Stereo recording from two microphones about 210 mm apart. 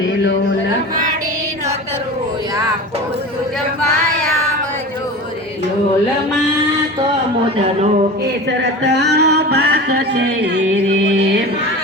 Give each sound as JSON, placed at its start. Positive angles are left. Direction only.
{"t": 8.9, "sound": "music", "side_deg": -55}
{"t": 10.5, "sound": "music", "side_deg": -35}